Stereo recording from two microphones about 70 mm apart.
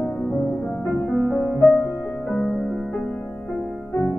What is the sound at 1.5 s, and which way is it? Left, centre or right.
Music, left.